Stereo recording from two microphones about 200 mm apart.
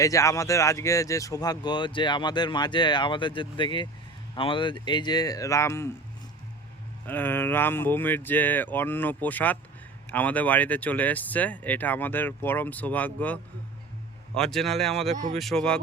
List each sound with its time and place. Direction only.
0.0 s speech: 15° left (ahead or behind)
7.1 s speech: 10° left (ahead or behind)
15.0 s speech: 35° right (ahead or behind)
15.4 s speech: centre (ahead or behind)